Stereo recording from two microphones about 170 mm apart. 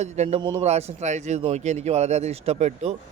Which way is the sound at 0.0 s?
40° right (ahead or behind).